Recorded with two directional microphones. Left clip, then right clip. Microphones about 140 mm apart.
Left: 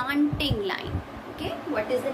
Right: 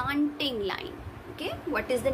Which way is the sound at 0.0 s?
15° right (ahead or behind).